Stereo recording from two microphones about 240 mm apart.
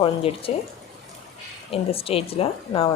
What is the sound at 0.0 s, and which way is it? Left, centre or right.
Speech, left.